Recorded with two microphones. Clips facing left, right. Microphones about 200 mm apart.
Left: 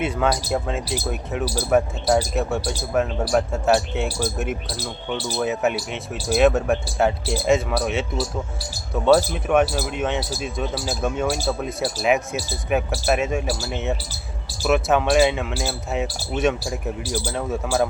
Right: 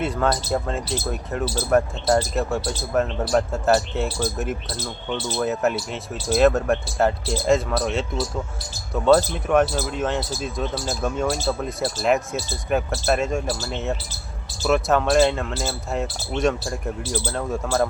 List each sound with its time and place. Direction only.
0.0 s speech: centre (ahead or behind)
5.7 s speech: 65° left (ahead or behind)
6.2 s speech: centre (ahead or behind)